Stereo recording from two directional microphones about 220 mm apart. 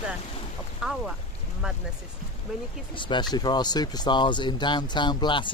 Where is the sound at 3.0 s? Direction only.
20° left (ahead or behind).